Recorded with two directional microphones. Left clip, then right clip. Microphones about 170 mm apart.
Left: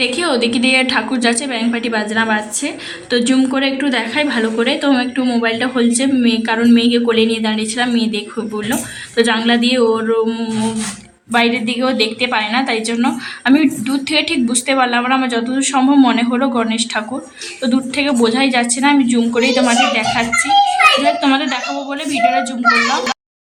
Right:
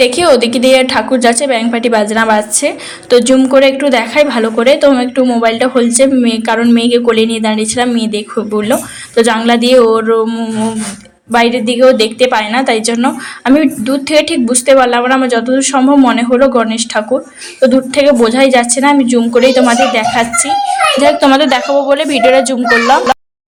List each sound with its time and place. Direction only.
0.0 s a woman's voice: 35° right (ahead or behind)
10.2 s a sound: 15° right (ahead or behind)
11.3 s a woman's voice: 20° right (ahead or behind)
21.0 s a woman's voice: 40° right (ahead or behind)